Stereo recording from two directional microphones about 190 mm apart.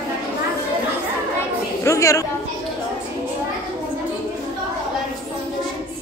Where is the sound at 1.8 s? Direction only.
15° left (ahead or behind).